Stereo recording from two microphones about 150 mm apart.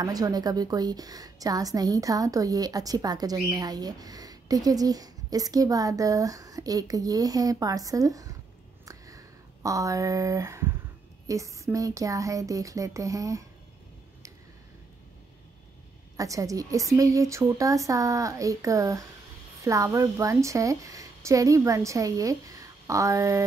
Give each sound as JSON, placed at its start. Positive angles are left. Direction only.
{"t": 0.0, "sound": "a woman's voice", "side_deg": -25}
{"t": 8.8, "sound": "a sound", "side_deg": -20}
{"t": 11.2, "sound": "a woman's voice", "side_deg": -20}
{"t": 16.2, "sound": "a woman's voice", "side_deg": -20}